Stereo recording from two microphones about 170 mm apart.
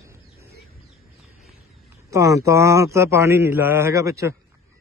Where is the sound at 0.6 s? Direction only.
Centre (ahead or behind).